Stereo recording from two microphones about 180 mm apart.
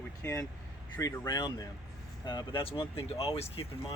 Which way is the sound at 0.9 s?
10° left (ahead or behind).